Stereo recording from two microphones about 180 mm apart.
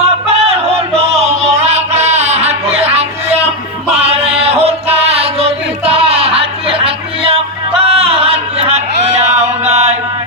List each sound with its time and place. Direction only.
0.3 s music: 35° right (ahead or behind)